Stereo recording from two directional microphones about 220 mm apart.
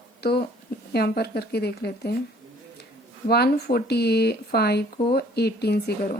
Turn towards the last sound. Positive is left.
turn(degrees=45)  # may be behind; listen again after turning